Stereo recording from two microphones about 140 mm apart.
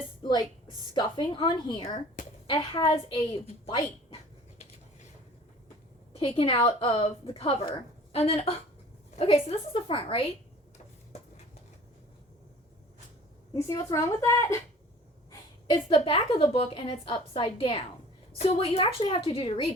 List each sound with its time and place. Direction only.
0.2 s a sound: 30° left (ahead or behind)
0.9 s a woman's voice: 35° left (ahead or behind)
1.8 s speech: 60° left (ahead or behind)
2.5 s a woman's voice: 40° left (ahead or behind)
6.1 s a woman's voice: 40° left (ahead or behind)
13.5 s a woman's voice: 20° left (ahead or behind)
15.6 s a woman's voice: 35° left (ahead or behind)